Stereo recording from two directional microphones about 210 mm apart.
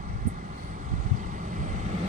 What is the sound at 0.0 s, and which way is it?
Vehicle, 40° right (ahead or behind).